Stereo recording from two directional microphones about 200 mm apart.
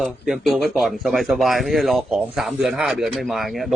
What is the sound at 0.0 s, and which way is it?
Speech, centre (ahead or behind).